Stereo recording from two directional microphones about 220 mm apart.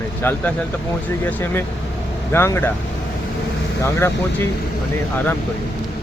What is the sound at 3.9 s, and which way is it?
Speech, 10° left (ahead or behind).